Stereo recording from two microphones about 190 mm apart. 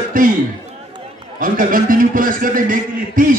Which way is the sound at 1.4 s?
45° right (ahead or behind).